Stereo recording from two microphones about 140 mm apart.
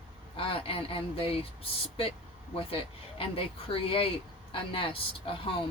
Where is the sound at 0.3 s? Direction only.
40° left (ahead or behind).